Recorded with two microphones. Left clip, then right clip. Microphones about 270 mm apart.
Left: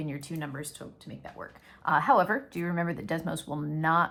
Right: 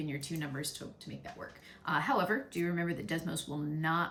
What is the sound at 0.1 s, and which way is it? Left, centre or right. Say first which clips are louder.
Speech: left 2 dB; centre.